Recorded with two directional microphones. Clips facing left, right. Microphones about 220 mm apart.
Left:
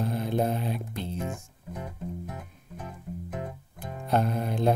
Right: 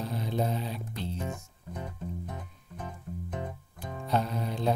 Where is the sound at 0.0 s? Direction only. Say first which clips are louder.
Left 4 dB; 55° left (ahead or behind).